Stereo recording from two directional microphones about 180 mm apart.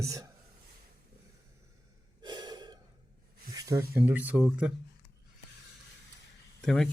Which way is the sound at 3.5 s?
20° right (ahead or behind).